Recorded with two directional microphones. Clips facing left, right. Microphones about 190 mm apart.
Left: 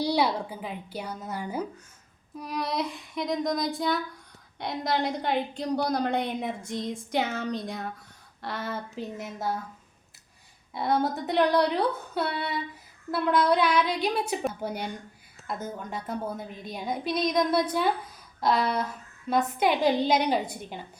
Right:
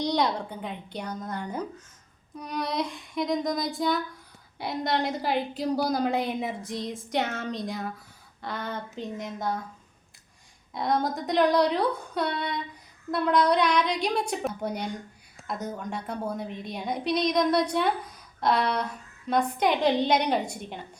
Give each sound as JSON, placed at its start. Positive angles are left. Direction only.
{"t": 0.0, "sound": "a woman's voice", "side_deg": 5}
{"t": 10.8, "sound": "a woman's voice", "side_deg": 5}